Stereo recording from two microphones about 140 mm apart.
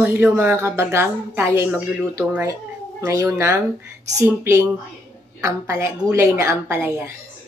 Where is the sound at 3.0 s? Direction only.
25° right (ahead or behind).